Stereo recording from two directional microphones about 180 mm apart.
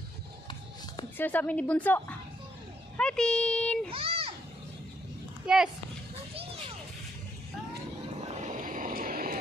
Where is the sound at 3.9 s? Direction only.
30° right (ahead or behind).